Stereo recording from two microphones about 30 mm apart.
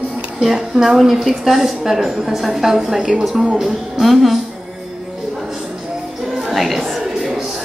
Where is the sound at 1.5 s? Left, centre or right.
Centre.